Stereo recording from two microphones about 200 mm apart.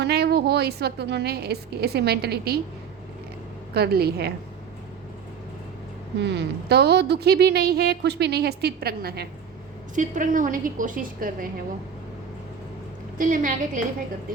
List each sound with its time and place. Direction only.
0.0 s a woman's voice: 55° right (ahead or behind)
3.8 s a woman's voice: 50° right (ahead or behind)
6.1 s a woman's voice: 60° right (ahead or behind)
9.9 s a woman's voice: 40° right (ahead or behind)
13.1 s a woman's voice: 40° right (ahead or behind)